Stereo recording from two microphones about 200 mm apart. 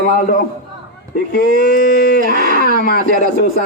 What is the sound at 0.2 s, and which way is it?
A man's voice, 45° left (ahead or behind).